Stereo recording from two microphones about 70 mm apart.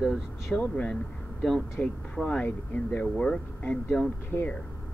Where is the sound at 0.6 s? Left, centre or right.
Centre.